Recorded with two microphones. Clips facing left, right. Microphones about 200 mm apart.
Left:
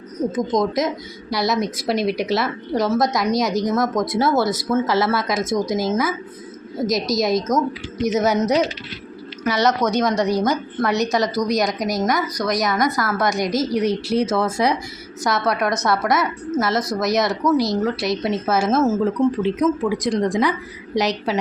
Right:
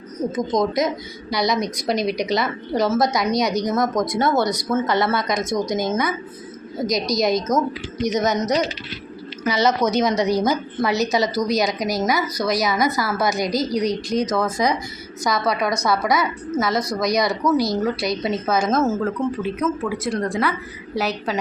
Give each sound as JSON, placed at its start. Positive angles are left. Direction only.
{"t": 0.3, "sound": "a woman's voice", "side_deg": 0}